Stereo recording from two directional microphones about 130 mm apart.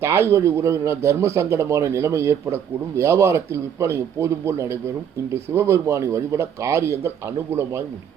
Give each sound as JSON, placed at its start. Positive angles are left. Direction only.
{"t": 0.0, "sound": "a man's voice", "side_deg": -20}